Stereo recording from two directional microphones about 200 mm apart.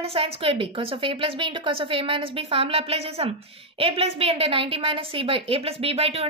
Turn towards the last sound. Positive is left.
turn(degrees=-30)  # may be behind; listen again after turning